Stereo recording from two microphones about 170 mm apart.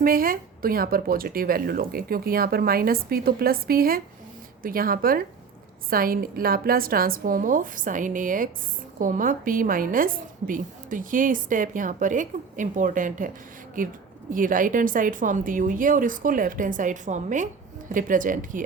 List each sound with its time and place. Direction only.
0.0 s a woman's voice: 55° right (ahead or behind)